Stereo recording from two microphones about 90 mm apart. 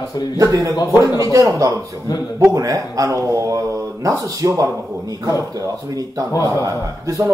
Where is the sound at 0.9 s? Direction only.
40° left (ahead or behind).